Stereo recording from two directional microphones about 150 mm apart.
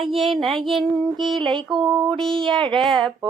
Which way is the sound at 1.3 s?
30° right (ahead or behind).